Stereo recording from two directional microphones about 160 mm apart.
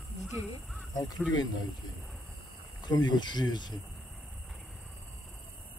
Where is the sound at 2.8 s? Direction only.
25° left (ahead or behind).